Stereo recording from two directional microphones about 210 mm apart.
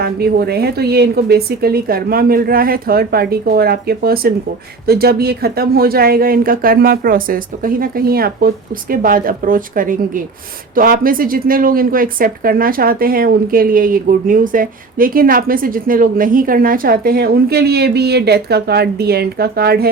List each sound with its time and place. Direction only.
0.0 s speech: 50° right (ahead or behind)